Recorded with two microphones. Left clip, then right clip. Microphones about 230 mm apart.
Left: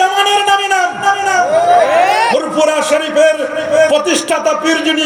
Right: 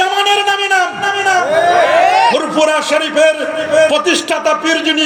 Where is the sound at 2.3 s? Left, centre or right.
Right.